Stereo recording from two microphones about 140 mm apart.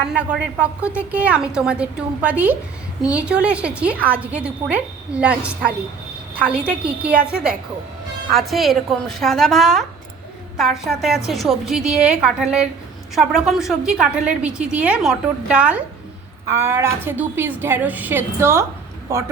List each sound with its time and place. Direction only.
0.1 s a woman's voice: 10° right (ahead or behind)
8.3 s a woman's voice: centre (ahead or behind); by 19.2 s 20° right (ahead or behind)